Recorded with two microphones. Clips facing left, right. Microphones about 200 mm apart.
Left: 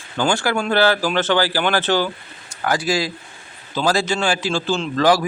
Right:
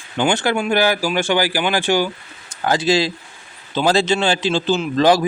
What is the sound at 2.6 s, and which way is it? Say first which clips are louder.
Speech: right 3 dB; 25° right (ahead or behind).